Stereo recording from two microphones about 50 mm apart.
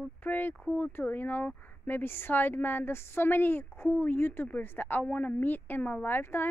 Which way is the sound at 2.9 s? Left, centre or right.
Left.